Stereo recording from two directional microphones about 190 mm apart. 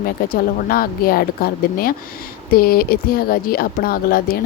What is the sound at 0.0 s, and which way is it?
Speech, 50° left (ahead or behind).